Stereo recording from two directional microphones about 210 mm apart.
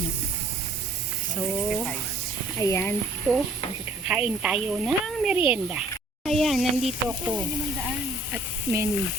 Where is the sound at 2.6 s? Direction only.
10° left (ahead or behind).